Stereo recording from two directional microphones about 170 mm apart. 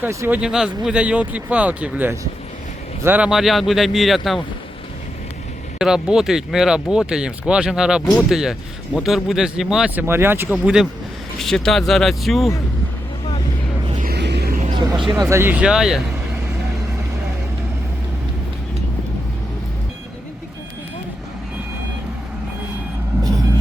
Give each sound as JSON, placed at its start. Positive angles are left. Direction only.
{"t": 0.0, "sound": "speech", "side_deg": -15}
{"t": 5.8, "sound": "speech", "side_deg": -5}
{"t": 14.1, "sound": "vehicle", "side_deg": -85}
{"t": 14.7, "sound": "vehicle", "side_deg": -25}
{"t": 15.1, "sound": "speech", "side_deg": -20}